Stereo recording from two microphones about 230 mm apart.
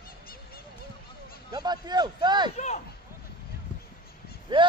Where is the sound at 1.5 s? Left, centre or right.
Centre.